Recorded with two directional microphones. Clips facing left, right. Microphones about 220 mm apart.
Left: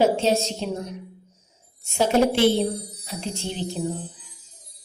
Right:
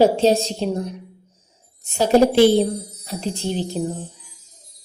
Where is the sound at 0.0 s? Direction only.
35° right (ahead or behind).